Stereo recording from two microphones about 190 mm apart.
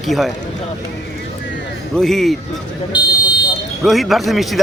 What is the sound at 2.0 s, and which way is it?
Speech, centre (ahead or behind).